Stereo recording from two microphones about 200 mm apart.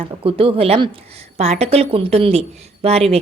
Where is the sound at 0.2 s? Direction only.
30° right (ahead or behind).